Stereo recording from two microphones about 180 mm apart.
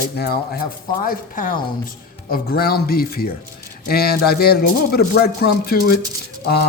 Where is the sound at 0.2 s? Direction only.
60° left (ahead or behind).